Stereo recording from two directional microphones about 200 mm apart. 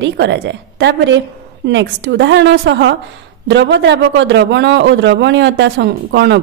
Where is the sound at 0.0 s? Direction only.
60° right (ahead or behind).